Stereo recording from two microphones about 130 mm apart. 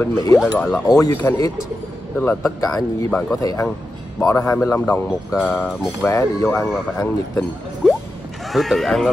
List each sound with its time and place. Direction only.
0.0 s speech: 25° left (ahead or behind)
2.1 s speech: 15° left (ahead or behind)
2.6 s speech: 25° left (ahead or behind)
3.1 s speech: 10° left (ahead or behind)
3.3 s speech: 25° left (ahead or behind)
4.6 s speech: 10° left (ahead or behind)
7.8 s a sound: centre (ahead or behind)
8.5 s speech: centre (ahead or behind)